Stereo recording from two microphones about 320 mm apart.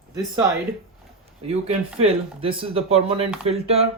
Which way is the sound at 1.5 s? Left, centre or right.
Centre.